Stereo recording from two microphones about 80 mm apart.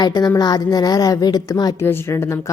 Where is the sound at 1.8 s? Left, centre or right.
Left.